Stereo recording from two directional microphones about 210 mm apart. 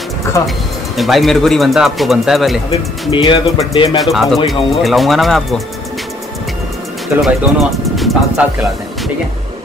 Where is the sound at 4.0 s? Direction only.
Centre (ahead or behind).